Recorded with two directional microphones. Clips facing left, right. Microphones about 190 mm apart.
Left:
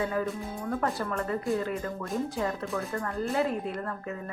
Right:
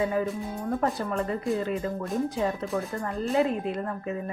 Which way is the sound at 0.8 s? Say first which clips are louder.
Right 3 dB; 20° right (ahead or behind).